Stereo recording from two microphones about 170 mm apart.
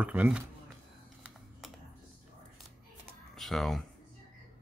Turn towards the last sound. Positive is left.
turn(degrees=0)  # may be behind; listen again after turning